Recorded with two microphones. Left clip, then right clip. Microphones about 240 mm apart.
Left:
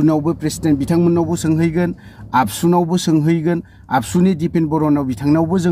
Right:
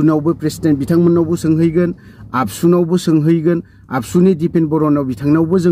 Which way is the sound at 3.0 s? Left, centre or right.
Centre.